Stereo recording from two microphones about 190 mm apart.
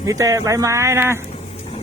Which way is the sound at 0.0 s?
15° right (ahead or behind).